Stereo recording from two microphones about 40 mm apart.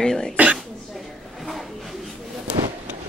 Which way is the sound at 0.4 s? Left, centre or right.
Right.